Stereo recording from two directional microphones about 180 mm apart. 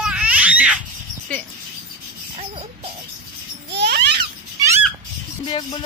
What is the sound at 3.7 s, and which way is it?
Babbling, 65° right (ahead or behind).